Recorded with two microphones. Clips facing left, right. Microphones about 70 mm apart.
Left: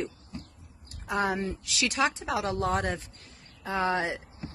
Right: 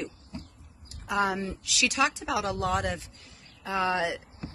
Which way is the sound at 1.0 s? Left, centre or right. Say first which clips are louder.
Right 1 dB; left.